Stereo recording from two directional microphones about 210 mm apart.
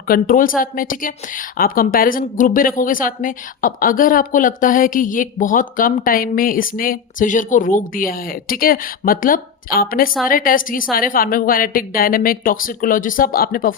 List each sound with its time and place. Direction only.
0.1 s a woman's voice: 40° left (ahead or behind)